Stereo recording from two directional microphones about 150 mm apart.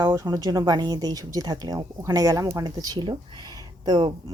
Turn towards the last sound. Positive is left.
turn(degrees=-30)  # may be behind; listen again after turning